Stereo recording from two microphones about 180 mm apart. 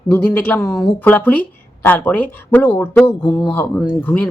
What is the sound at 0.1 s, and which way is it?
A woman's voice, 10° left (ahead or behind).